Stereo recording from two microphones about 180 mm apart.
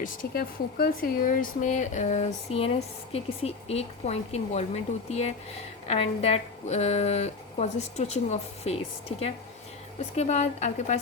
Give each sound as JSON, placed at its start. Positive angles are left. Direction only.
{"t": 0.0, "sound": "speech", "side_deg": 50}
{"t": 10.2, "sound": "speech", "side_deg": 40}